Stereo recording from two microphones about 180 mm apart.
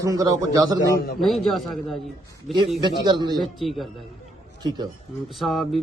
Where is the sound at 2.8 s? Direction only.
25° right (ahead or behind).